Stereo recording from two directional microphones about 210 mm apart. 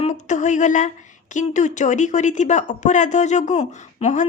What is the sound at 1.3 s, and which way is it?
Speech, 35° left (ahead or behind).